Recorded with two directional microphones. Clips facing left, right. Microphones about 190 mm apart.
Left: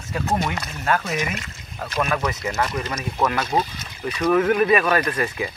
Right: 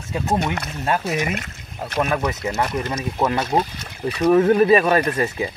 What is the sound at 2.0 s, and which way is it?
Speech, 20° right (ahead or behind).